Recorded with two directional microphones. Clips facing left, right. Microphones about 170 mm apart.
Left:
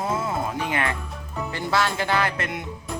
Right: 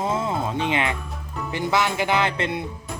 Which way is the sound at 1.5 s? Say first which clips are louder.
Right 2 dB; 15° right (ahead or behind).